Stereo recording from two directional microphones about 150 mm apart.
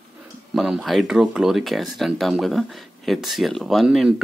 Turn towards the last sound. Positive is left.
turn(degrees=0)  # may be behind; listen again after turning